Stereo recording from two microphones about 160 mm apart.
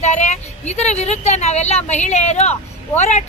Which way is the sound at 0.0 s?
45° left (ahead or behind).